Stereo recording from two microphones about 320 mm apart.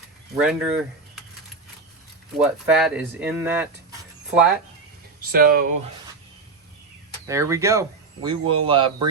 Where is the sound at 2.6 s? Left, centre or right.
Centre.